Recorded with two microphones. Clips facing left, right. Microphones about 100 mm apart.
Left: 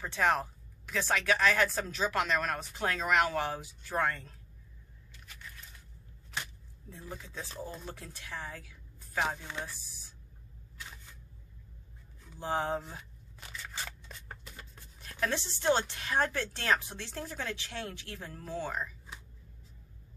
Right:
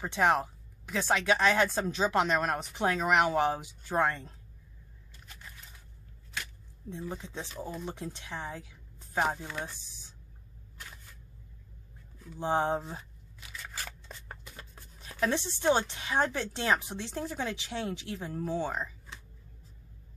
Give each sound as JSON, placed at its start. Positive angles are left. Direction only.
{"t": 0.0, "sound": "speech", "side_deg": -15}
{"t": 6.9, "sound": "a woman's voice", "side_deg": -20}
{"t": 12.4, "sound": "speech", "side_deg": -25}
{"t": 15.0, "sound": "speech", "side_deg": -15}